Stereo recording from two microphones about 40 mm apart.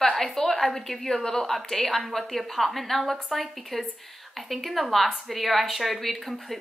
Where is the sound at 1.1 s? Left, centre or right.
Centre.